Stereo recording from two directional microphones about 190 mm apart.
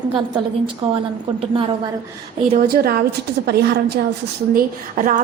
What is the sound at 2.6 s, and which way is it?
A woman's voice, 55° right (ahead or behind).